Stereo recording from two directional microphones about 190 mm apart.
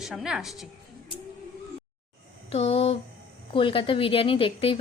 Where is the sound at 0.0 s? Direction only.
5° right (ahead or behind).